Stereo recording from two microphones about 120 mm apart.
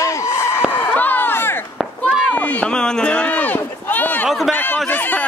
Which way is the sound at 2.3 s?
10° left (ahead or behind).